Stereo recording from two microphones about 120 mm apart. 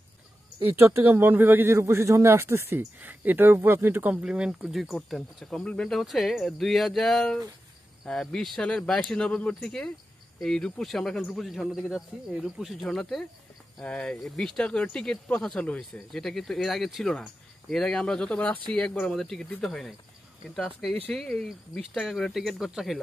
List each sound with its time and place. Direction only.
0.6 s speech: 20° right (ahead or behind); by 22.9 s 5° right (ahead or behind)